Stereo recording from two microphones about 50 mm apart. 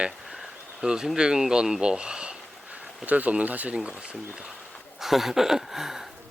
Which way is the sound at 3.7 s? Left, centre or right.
Right.